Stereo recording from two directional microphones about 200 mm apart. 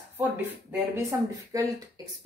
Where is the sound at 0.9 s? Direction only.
15° right (ahead or behind).